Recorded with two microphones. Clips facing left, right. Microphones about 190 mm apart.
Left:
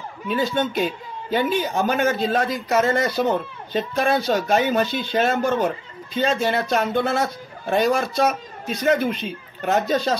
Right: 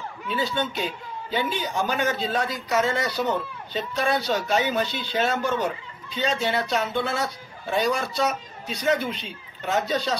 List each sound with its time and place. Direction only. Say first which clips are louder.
0.3 s a man's voice: left 5 dB; 45° left (ahead or behind)